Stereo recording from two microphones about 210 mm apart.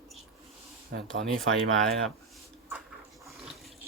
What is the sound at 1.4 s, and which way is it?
Speech, 70° right (ahead or behind).